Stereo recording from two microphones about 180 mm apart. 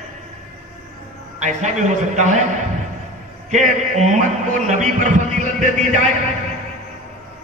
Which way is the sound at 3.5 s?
40° right (ahead or behind).